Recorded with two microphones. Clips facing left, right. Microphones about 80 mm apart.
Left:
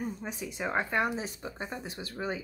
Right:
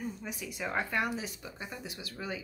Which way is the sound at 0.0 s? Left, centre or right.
Left.